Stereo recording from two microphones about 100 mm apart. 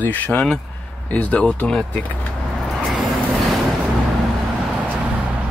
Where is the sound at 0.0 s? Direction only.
20° left (ahead or behind).